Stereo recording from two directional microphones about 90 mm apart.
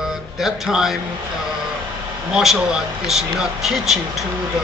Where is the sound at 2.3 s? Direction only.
5° right (ahead or behind).